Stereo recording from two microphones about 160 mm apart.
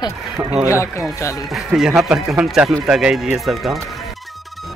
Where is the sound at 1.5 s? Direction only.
Centre (ahead or behind).